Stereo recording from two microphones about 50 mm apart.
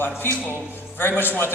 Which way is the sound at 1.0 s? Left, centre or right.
Left.